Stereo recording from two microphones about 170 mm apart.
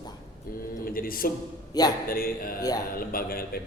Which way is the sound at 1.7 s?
20° left (ahead or behind).